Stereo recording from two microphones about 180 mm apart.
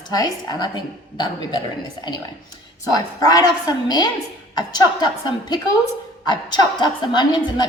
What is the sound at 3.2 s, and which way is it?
A woman's voice, 20° left (ahead or behind).